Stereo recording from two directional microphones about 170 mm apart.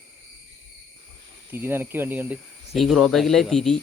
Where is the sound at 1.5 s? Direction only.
15° right (ahead or behind).